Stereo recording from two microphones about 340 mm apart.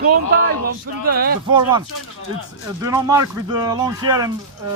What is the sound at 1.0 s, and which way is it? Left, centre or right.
Speech, right.